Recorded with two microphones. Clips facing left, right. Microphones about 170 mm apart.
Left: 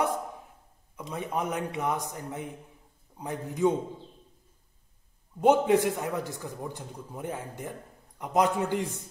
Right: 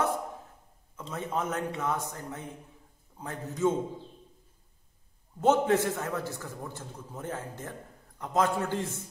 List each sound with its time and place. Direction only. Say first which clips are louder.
0.9 s a man's voice: left 1 dB; 15° left (ahead or behind)
5.4 s a man's voice: left 2 dB; 15° left (ahead or behind)